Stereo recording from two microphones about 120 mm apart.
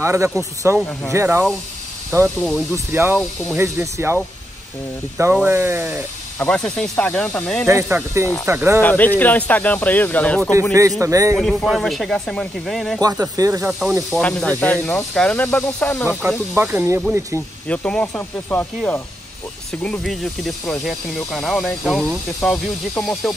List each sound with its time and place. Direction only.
0.0 s speech: 25° right (ahead or behind)
6.4 s speech: 5° left (ahead or behind)
8.2 s speech: 25° right (ahead or behind)
8.8 s speech: 15° left (ahead or behind)
10.7 s speech: 25° right (ahead or behind)
11.3 s speech: centre (ahead or behind)
13.0 s speech: 25° right (ahead or behind)
13.7 s speech: centre (ahead or behind); by 16.1 s 15° left (ahead or behind)
16.1 s speech: 5° right (ahead or behind)
16.5 s speech: 20° right (ahead or behind)
17.6 s speech: 10° left (ahead or behind)
19.8 s speech: 5° left (ahead or behind)